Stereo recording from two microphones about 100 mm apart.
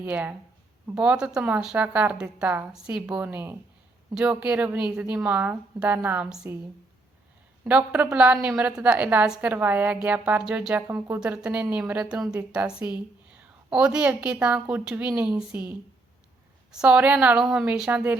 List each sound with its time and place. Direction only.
0.0 s a woman's voice: 15° right (ahead or behind)
2.7 s a woman's voice: 10° right (ahead or behind)
7.6 s a woman's voice: 15° right (ahead or behind)